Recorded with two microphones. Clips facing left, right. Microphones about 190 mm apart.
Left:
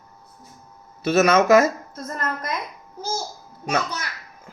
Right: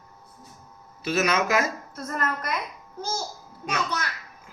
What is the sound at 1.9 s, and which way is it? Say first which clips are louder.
Speech: even; 20° left (ahead or behind).